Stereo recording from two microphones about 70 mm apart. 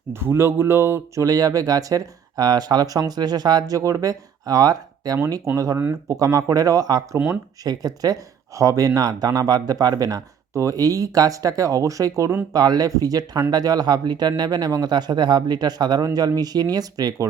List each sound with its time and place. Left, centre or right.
0.1 s speech: right
5.1 s speech: right
9.0 s speech: right
12.5 s speech: right